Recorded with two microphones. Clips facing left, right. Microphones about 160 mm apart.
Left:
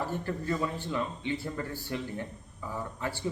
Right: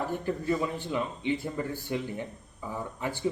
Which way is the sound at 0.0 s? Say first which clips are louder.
Right 2 dB; 15° right (ahead or behind).